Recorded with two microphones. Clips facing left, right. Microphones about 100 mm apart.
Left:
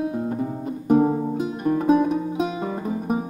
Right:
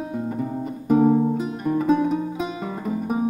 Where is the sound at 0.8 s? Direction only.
25° left (ahead or behind).